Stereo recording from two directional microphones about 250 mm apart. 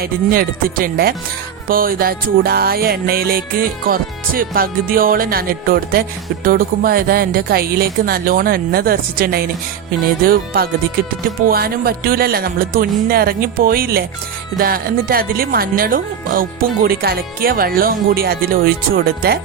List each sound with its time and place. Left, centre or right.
0.0 s music: right